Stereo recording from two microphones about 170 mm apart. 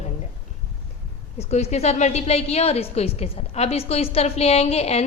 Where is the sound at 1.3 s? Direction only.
40° left (ahead or behind).